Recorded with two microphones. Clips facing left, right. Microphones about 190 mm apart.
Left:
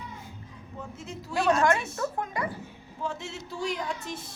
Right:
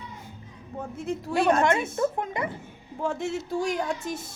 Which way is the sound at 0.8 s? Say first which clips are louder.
Right 8 dB; 55° right (ahead or behind).